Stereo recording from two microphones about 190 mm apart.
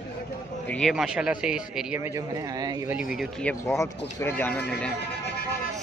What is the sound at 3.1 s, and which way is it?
Speech, 5° left (ahead or behind).